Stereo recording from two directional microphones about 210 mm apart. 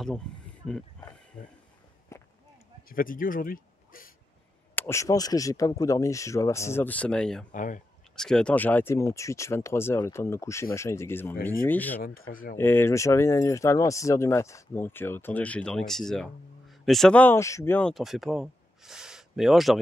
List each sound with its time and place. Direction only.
1.4 s speech: 55° left (ahead or behind)
2.1 s a sound: 15° left (ahead or behind)
2.9 s speech: 40° left (ahead or behind)
4.7 s speech: 10° left (ahead or behind)
7.5 s speech: 40° left (ahead or behind)
8.2 s speech: 5° left (ahead or behind)
12.0 s speech: 45° left (ahead or behind)
12.5 s speech: 10° left (ahead or behind)